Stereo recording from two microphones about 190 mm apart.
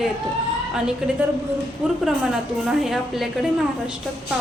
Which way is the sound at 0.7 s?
5° right (ahead or behind).